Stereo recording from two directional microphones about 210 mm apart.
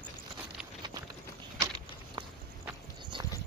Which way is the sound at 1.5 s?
20° right (ahead or behind).